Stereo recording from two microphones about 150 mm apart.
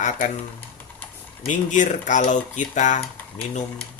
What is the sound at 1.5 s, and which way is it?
Speech, 55° left (ahead or behind).